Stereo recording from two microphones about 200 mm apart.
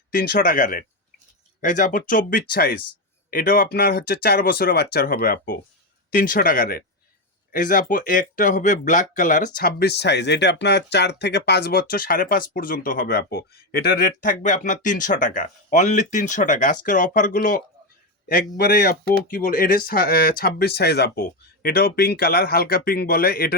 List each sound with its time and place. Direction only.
0.1 s speech: 45° left (ahead or behind)
9.6 s speech: 50° left (ahead or behind)